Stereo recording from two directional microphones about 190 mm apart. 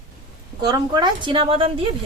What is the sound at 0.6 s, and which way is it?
A woman's voice, 20° right (ahead or behind).